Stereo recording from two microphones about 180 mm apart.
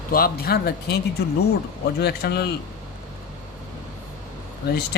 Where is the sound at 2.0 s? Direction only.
60° left (ahead or behind).